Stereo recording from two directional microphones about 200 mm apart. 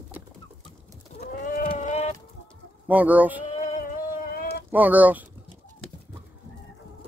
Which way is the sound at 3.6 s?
40° left (ahead or behind).